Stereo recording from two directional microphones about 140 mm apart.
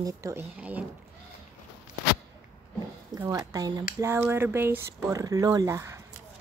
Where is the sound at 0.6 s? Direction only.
10° right (ahead or behind).